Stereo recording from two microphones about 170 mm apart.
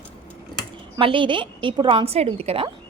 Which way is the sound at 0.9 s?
30° right (ahead or behind).